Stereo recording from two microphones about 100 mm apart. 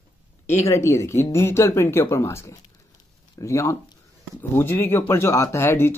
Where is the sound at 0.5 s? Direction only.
30° left (ahead or behind).